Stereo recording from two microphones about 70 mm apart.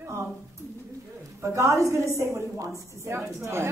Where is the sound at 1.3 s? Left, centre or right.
Right.